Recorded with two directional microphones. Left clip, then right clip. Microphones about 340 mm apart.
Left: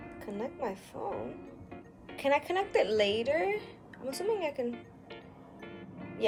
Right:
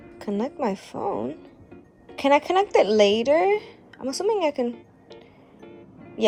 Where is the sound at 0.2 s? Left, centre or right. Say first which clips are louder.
Right 10 dB; right.